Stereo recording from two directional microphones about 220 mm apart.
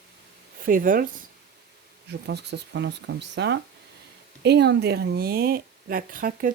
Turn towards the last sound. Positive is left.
turn(degrees=-40)  # may be behind; listen again after turning